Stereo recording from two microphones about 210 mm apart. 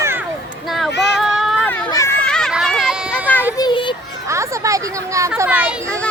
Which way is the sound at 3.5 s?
20° left (ahead or behind).